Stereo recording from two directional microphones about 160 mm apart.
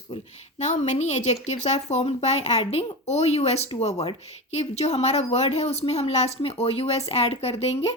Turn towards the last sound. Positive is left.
turn(degrees=40)  # may be behind; listen again after turning